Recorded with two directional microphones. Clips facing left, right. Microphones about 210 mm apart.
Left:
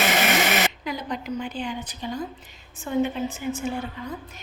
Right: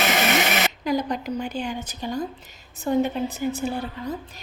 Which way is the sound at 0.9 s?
40° right (ahead or behind).